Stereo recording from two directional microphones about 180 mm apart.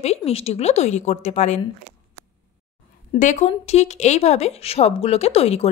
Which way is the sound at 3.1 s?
40° left (ahead or behind).